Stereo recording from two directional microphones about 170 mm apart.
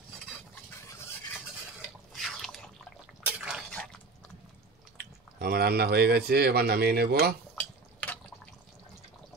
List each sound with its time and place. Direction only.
2.1 s drip: centre (ahead or behind)
3.3 s a sound: 5° right (ahead or behind)
4.9 s speech: 70° right (ahead or behind)
7.5 s drip: 10° left (ahead or behind)